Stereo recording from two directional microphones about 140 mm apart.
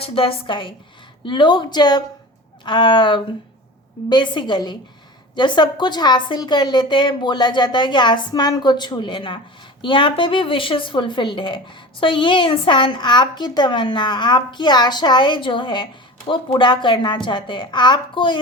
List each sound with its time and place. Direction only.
0.0 s a woman's voice: 40° left (ahead or behind)